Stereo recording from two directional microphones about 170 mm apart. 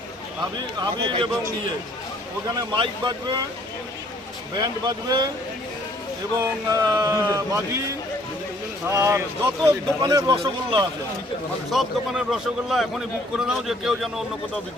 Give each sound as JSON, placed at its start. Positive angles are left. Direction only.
{"t": 0.8, "sound": "a man's voice", "side_deg": -25}
{"t": 2.6, "sound": "a man's voice", "side_deg": -30}
{"t": 4.5, "sound": "a man's voice", "side_deg": -25}
{"t": 6.4, "sound": "a man's voice", "side_deg": -20}
{"t": 8.9, "sound": "a man's voice", "side_deg": -15}
{"t": 11.7, "sound": "a man's voice", "side_deg": 0}